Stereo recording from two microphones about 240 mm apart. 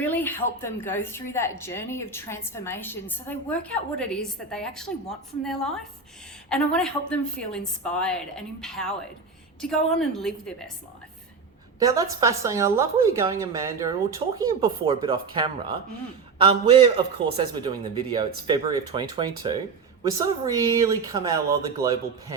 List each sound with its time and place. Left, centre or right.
0.0 s a woman's voice: centre
11.8 s a man's voice: centre